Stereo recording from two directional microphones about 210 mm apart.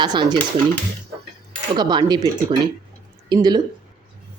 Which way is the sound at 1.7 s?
20° right (ahead or behind).